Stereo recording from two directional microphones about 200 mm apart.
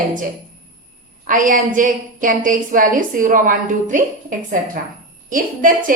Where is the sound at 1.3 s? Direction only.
40° right (ahead or behind).